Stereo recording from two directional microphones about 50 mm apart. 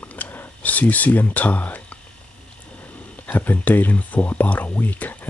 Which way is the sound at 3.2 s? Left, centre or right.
Left.